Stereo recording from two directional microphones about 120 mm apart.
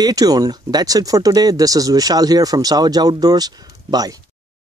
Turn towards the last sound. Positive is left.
turn(degrees=-30)  # may be behind; listen again after turning